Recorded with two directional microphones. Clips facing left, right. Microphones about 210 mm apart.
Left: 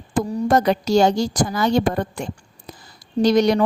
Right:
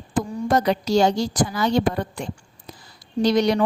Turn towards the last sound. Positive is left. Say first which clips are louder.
# left 3 dB
turn(degrees=45)  # may be behind; listen again after turning